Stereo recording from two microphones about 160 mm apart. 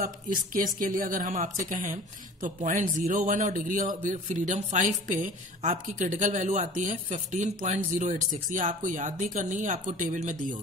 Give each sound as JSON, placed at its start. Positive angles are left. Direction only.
{"t": 0.0, "sound": "a woman's voice", "side_deg": -60}